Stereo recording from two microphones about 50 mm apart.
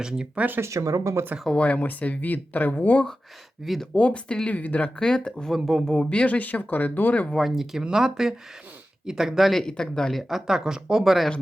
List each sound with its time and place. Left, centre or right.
0.6 s speech: right
1.5 s speech: left
3.9 s speech: left
4.9 s speech: centre
5.5 s speech: centre
5.8 s speech: centre
6.1 s speech: left
7.3 s speech: centre
9.5 s speech: centre
10.2 s speech: centre